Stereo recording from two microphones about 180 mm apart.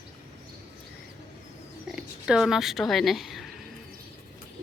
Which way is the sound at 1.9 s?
5° right (ahead or behind).